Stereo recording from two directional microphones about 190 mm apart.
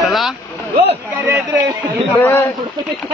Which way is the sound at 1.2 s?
15° right (ahead or behind).